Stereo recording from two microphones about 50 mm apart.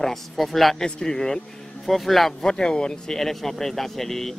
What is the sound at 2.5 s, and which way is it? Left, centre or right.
Speech, centre.